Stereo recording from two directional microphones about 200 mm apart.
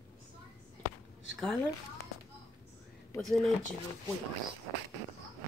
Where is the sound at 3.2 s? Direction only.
Centre (ahead or behind).